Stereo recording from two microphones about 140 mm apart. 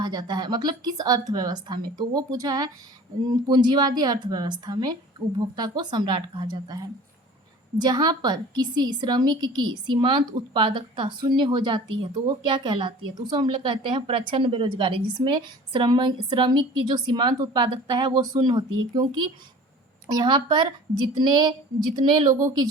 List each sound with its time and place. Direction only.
0.0 s a woman's voice: 30° right (ahead or behind)